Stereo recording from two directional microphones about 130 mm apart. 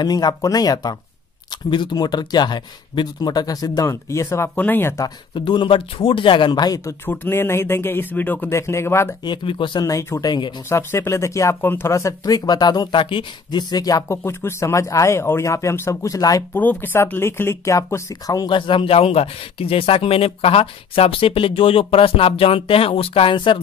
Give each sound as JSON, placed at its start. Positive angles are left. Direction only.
{"t": 0.0, "sound": "speech", "side_deg": 30}
{"t": 5.0, "sound": "speech", "side_deg": 35}
{"t": 9.2, "sound": "speech", "side_deg": 40}
{"t": 16.5, "sound": "speech", "side_deg": 15}